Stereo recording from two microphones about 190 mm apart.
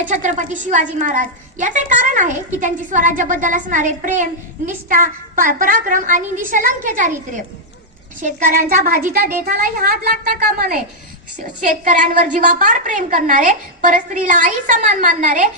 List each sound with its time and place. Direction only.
0.0 s a woman's voice: 40° right (ahead or behind)
8.2 s a woman's voice: 45° right (ahead or behind)